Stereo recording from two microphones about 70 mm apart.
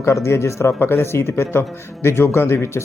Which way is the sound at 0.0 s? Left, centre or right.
Left.